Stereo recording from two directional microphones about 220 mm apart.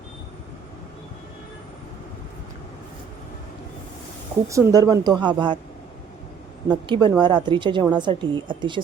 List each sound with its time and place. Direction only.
4.4 s speech: 15° right (ahead or behind)
6.7 s a woman's voice: 20° right (ahead or behind)